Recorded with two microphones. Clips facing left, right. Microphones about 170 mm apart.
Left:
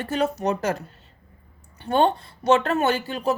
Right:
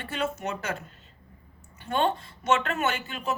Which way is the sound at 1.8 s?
35° left (ahead or behind).